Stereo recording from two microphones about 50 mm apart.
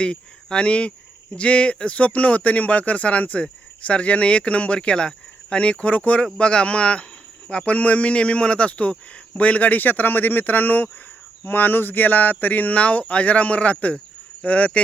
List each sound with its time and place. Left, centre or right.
0.0 s speech: centre